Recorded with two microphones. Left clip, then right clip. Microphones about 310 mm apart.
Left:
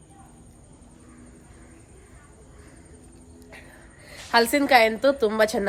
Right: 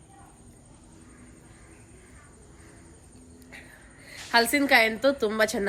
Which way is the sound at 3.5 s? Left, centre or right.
Centre.